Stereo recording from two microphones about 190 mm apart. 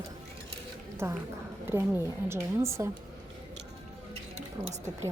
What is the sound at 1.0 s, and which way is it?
A woman's voice, 15° right (ahead or behind).